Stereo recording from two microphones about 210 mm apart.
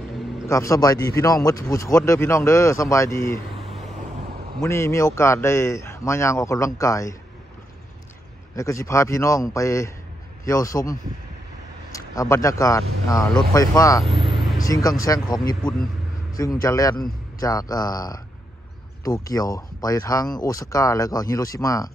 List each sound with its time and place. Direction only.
0.5 s speech: 15° left (ahead or behind)
4.6 s speech: 15° left (ahead or behind)
8.5 s a man's voice: 15° left (ahead or behind)
14.0 s speech: 25° right (ahead or behind)
14.7 s speech: 15° left (ahead or behind)